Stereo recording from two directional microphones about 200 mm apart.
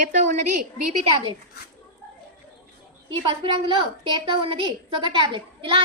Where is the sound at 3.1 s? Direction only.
25° right (ahead or behind).